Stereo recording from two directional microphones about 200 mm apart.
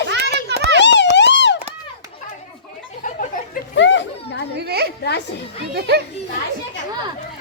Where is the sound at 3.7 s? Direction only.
65° left (ahead or behind).